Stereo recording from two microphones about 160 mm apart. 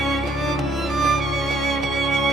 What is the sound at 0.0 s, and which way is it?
Music, centre (ahead or behind).